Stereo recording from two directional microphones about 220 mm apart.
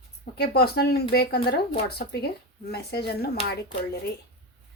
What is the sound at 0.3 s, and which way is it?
A woman's voice, 45° left (ahead or behind).